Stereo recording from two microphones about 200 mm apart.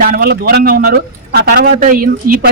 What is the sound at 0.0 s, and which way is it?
A man's voice, 45° right (ahead or behind).